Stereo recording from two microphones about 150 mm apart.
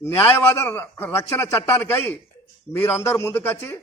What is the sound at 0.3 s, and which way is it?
A man's voice, 15° left (ahead or behind).